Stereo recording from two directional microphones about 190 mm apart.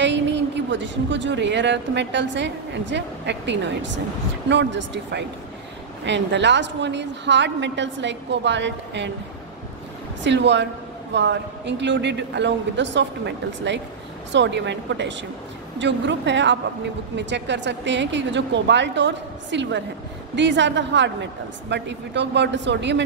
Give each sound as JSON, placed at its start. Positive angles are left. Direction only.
{"t": 0.0, "sound": "a woman's voice", "side_deg": -70}
{"t": 10.2, "sound": "a woman's voice", "side_deg": -70}